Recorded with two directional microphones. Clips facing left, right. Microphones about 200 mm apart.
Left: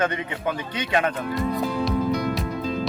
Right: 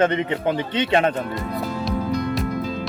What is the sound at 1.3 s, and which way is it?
Speech, centre (ahead or behind).